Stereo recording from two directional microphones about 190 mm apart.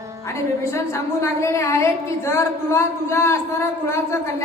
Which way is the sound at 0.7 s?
15° left (ahead or behind).